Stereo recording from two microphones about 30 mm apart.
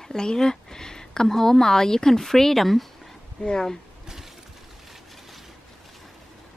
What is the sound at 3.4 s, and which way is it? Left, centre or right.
Speech, left.